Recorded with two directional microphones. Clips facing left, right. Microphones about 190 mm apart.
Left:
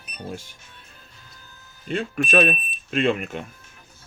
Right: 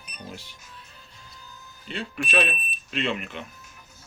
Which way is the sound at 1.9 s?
45° left (ahead or behind).